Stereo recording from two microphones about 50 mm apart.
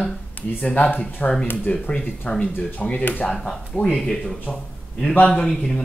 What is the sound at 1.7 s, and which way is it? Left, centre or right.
Speech, centre.